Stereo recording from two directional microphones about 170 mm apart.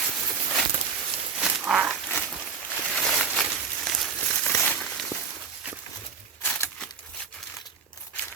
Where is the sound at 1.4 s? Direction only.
5° right (ahead or behind).